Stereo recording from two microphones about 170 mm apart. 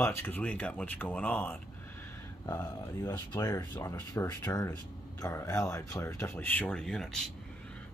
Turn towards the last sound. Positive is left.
turn(degrees=5)  # may be behind; listen again after turning